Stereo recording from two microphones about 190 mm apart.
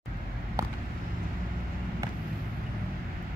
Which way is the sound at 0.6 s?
15° right (ahead or behind).